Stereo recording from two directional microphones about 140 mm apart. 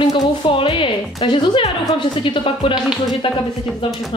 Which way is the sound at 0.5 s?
40° left (ahead or behind).